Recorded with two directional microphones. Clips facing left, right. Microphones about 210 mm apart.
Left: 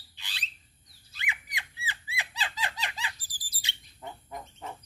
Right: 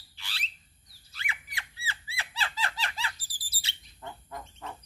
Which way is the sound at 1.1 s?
20° left (ahead or behind).